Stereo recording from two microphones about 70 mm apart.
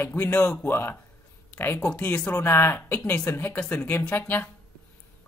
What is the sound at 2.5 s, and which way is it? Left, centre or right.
Speech, left.